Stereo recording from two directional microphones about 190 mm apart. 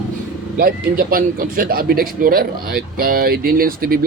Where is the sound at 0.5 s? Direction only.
50° right (ahead or behind).